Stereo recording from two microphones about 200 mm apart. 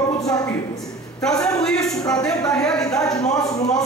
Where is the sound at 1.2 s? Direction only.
5° left (ahead or behind).